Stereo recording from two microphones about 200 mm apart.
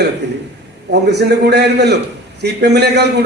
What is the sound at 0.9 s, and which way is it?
A man's voice, 55° right (ahead or behind).